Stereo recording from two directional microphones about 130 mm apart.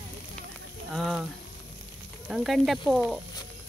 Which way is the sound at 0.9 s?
Centre (ahead or behind).